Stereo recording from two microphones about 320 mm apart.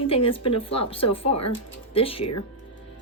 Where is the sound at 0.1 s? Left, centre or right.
Centre.